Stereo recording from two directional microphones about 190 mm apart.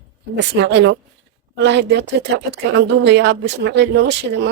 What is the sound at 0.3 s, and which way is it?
A woman's voice, 65° right (ahead or behind).